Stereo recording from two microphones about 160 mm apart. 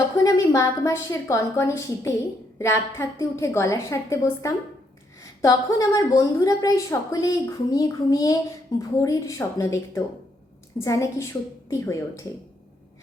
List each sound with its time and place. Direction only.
0.2 s a woman's voice: 20° left (ahead or behind)